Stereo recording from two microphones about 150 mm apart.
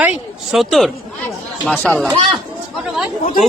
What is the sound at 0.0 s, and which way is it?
Speech, 5° right (ahead or behind).